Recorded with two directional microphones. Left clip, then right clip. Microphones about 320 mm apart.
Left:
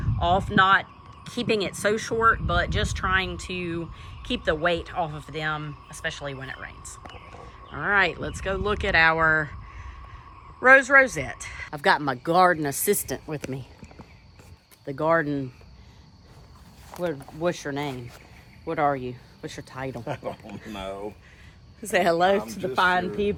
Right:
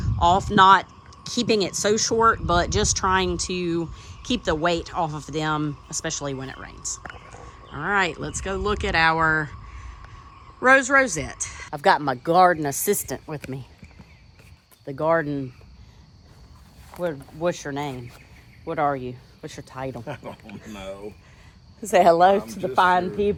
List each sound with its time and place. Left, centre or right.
0.0 s speech: centre
7.0 s whispering: centre
7.4 s speech: centre
14.8 s speech: centre
16.9 s speech: centre
20.1 s speech: left
21.8 s speech: centre